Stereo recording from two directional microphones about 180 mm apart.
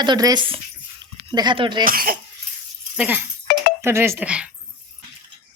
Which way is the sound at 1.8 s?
55° right (ahead or behind).